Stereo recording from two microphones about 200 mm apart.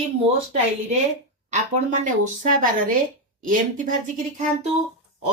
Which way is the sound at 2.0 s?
40° right (ahead or behind).